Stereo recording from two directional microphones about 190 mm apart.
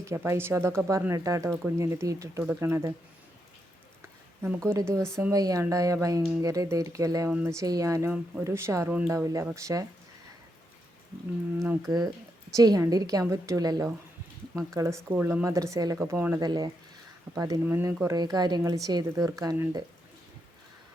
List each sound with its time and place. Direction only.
0.0 s a woman's voice: 15° right (ahead or behind)
4.4 s a woman's voice: 15° right (ahead or behind)
11.6 s a woman's voice: 15° right (ahead or behind)